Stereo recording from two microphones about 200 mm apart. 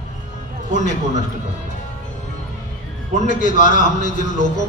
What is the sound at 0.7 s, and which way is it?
Speech, 40° left (ahead or behind).